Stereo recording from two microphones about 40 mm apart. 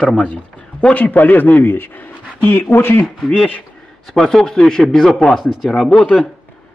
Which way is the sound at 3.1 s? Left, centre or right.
Centre.